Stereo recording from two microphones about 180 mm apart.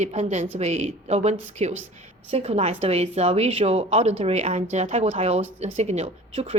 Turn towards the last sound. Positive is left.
turn(degrees=-35)  # may be behind; listen again after turning